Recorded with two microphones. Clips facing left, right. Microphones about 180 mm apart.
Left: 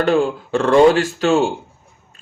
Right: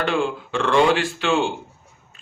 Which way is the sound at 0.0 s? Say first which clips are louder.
Left 6 dB; 40° left (ahead or behind).